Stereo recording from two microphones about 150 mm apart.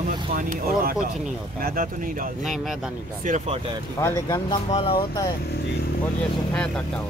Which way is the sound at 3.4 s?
35° right (ahead or behind).